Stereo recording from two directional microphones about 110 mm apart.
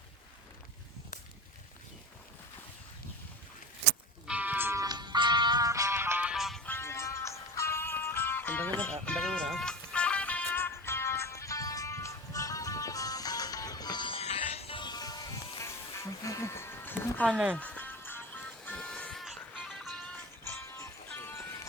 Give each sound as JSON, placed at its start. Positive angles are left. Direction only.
{"t": 4.3, "sound": "music", "side_deg": -15}
{"t": 4.8, "sound": "music", "side_deg": -40}
{"t": 6.2, "sound": "music", "side_deg": -5}
{"t": 6.7, "sound": "music", "side_deg": 25}
{"t": 14.2, "sound": "music", "side_deg": 65}
{"t": 14.8, "sound": "music", "side_deg": 40}
{"t": 17.3, "sound": "speech", "side_deg": -15}
{"t": 17.6, "sound": "music", "side_deg": 15}
{"t": 20.5, "sound": "music", "side_deg": 25}